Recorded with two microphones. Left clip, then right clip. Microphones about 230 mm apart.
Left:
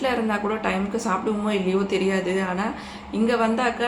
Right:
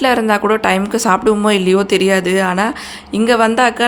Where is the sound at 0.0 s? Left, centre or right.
Right.